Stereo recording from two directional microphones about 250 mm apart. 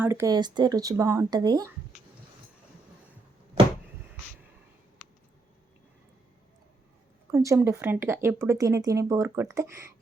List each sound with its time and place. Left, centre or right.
0.0 s speech: centre
3.6 s a sound: right
7.3 s speech: centre